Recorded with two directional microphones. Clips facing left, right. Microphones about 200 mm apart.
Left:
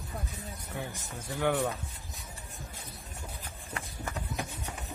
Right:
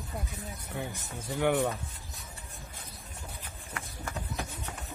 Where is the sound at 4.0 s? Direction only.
15° left (ahead or behind).